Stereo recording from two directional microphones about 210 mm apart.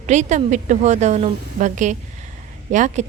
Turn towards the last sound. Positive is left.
turn(degrees=-35)  # may be behind; listen again after turning